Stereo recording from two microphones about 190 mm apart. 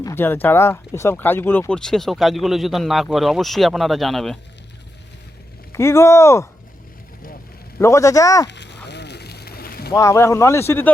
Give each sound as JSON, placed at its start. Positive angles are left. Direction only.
{"t": 0.0, "sound": "speech", "side_deg": 15}
{"t": 5.7, "sound": "speech", "side_deg": 15}
{"t": 7.8, "sound": "speech", "side_deg": 15}
{"t": 8.4, "sound": "a sound", "side_deg": 65}
{"t": 9.9, "sound": "speech", "side_deg": 15}